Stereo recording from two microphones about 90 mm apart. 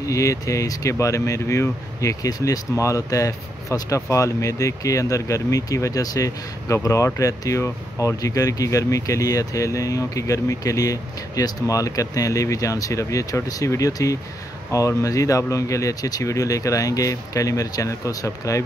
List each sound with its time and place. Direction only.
0.1 s speech: 35° left (ahead or behind)